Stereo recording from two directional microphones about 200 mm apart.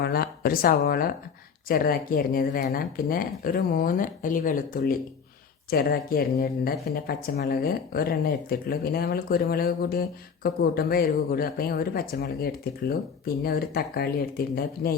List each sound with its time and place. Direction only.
0.0 s speech: 50° left (ahead or behind)